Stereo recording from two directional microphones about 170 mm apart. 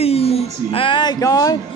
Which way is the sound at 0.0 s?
35° left (ahead or behind).